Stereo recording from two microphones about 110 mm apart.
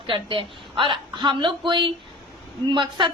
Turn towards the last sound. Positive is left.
turn(degrees=-45)  # may be behind; listen again after turning